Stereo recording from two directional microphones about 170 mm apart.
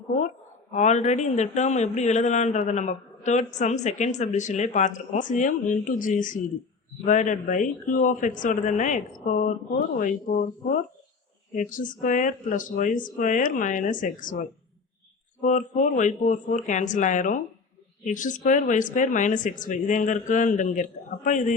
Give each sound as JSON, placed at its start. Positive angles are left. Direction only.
{"t": 0.7, "sound": "speech", "side_deg": 45}
{"t": 10.0, "sound": "speech", "side_deg": 55}
{"t": 15.4, "sound": "speech", "side_deg": 50}